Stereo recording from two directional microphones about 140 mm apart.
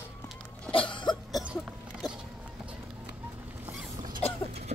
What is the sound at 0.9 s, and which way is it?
Cough, 35° left (ahead or behind).